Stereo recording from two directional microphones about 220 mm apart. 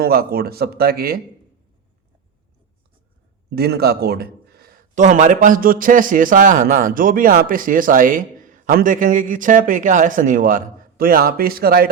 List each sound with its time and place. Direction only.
0.0 s speech: 45° right (ahead or behind)
3.5 s a man's voice: 45° right (ahead or behind)